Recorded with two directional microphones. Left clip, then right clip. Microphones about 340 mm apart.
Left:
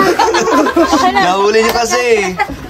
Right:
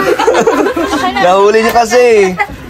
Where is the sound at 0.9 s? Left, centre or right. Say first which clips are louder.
Left 2 dB; left.